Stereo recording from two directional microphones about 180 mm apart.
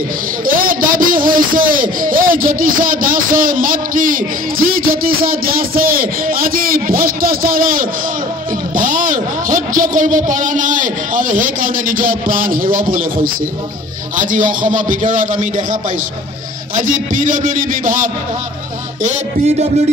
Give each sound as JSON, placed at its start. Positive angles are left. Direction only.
{"t": 0.5, "sound": "a man's voice", "side_deg": -50}